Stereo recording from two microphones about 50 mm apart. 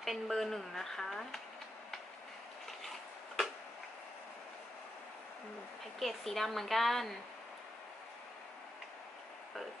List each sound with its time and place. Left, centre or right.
0.0 s speech: centre
5.9 s speech: centre